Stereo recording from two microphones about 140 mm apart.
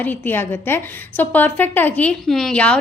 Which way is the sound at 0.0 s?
15° left (ahead or behind).